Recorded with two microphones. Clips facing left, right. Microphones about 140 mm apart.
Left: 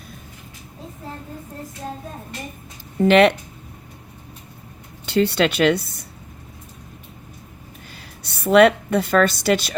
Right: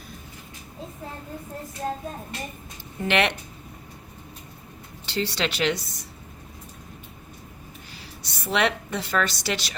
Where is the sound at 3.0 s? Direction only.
45° left (ahead or behind).